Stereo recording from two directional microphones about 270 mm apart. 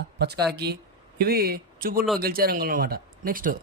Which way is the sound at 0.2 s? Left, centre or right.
Right.